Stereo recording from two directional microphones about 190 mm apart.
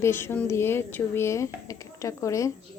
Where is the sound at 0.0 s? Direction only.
10° left (ahead or behind).